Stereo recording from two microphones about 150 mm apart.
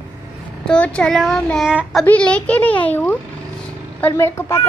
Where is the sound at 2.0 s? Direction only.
10° left (ahead or behind).